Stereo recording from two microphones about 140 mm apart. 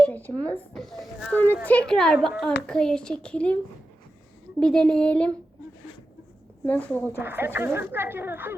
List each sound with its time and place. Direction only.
0.0 s a sound: 15° left (ahead or behind)
0.7 s a child's voice: centre (ahead or behind)
4.6 s a child's voice: 5° left (ahead or behind)
6.7 s a woman's voice: 10° left (ahead or behind)
7.2 s speech: 15° right (ahead or behind)